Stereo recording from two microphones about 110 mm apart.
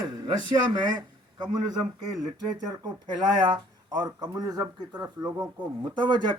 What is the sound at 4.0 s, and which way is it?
Speech, 35° right (ahead or behind).